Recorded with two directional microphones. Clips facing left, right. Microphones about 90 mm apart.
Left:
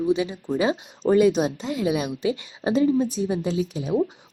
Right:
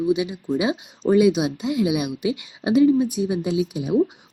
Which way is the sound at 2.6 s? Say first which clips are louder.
Right 4 dB; 35° left (ahead or behind).